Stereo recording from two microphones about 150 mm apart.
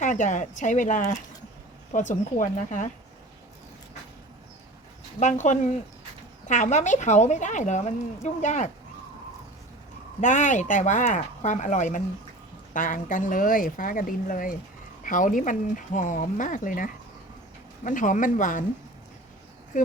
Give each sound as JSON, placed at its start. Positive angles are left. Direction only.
{"t": 0.0, "sound": "speech", "side_deg": 55}
{"t": 5.2, "sound": "a woman's voice", "side_deg": 55}
{"t": 10.2, "sound": "speech", "side_deg": 55}
{"t": 19.7, "sound": "speech", "side_deg": 55}